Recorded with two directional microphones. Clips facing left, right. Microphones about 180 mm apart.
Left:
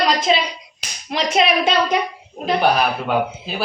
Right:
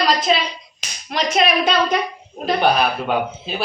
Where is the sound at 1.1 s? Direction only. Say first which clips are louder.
Left 1 dB; 25° left (ahead or behind).